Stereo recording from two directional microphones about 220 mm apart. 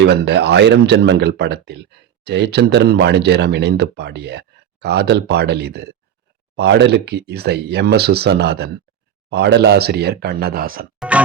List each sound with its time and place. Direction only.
0.0 s speech: 50° right (ahead or behind)